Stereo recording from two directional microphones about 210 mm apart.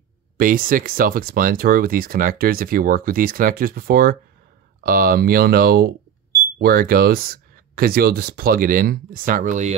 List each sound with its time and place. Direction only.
0.4 s speech: 40° right (ahead or behind)